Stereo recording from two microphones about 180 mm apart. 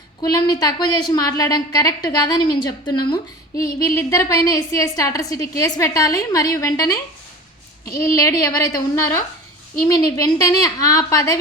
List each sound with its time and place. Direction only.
0.2 s a woman's voice: 25° left (ahead or behind)